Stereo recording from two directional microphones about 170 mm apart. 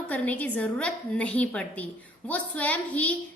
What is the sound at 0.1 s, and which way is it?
A woman's voice, 10° left (ahead or behind).